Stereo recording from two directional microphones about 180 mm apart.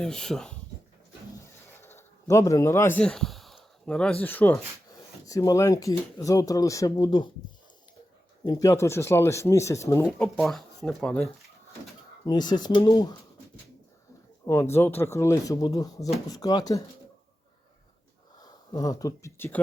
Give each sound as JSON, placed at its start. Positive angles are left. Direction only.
{"t": 0.0, "sound": "speech", "side_deg": 5}
{"t": 1.8, "sound": "a sound", "side_deg": 15}
{"t": 4.2, "sound": "speech", "side_deg": 10}
{"t": 8.4, "sound": "speech", "side_deg": 20}
{"t": 10.1, "sound": "speech", "side_deg": 0}
{"t": 12.2, "sound": "speech", "side_deg": 25}
{"t": 14.4, "sound": "speech", "side_deg": 15}
{"t": 18.3, "sound": "speech", "side_deg": 20}